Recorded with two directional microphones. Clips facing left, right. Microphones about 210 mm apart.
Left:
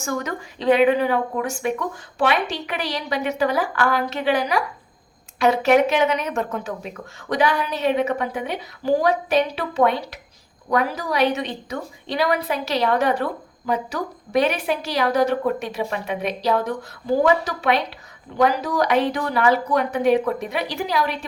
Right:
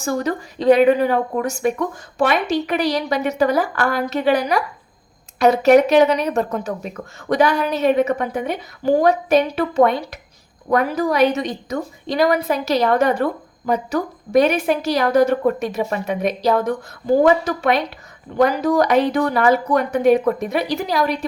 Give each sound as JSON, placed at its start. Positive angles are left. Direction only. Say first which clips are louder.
{"t": 0.0, "sound": "a woman's voice", "louder": "right 5 dB", "side_deg": -35}